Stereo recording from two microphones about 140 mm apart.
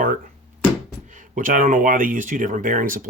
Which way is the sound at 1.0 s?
65° right (ahead or behind).